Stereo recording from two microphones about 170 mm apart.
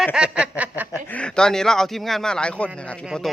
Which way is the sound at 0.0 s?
5° right (ahead or behind).